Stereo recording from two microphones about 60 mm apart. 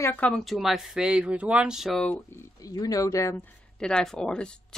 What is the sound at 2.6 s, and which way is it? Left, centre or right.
Speech, left.